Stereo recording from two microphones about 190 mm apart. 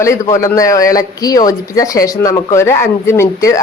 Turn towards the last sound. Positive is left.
turn(degrees=15)  # may be behind; listen again after turning